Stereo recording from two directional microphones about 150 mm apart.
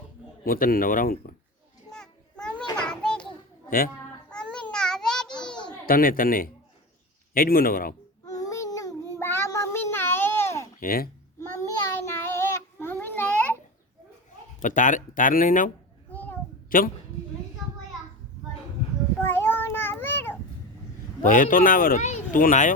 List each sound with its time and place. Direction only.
0.4 s speech: 75° left (ahead or behind)
1.9 s children playing: 5° left (ahead or behind)
4.3 s babbling: 5° left (ahead or behind)
5.8 s speech: 75° left (ahead or behind)
8.3 s child singing: 25° left (ahead or behind)
10.8 s a child's voice: 75° left (ahead or behind)
11.3 s child singing: 20° left (ahead or behind)
14.6 s a woman's voice: 60° left (ahead or behind)
19.2 s child singing: 15° left (ahead or behind)
21.2 s speech: 65° left (ahead or behind)